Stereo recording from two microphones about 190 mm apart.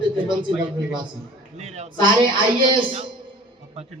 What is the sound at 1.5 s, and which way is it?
A man's voice, 35° right (ahead or behind).